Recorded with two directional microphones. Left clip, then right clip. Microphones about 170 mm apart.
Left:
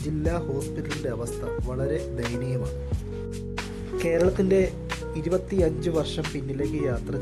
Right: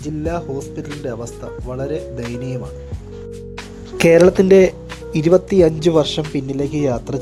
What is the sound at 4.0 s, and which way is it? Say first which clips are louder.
Speech: right 12 dB; 65° right (ahead or behind).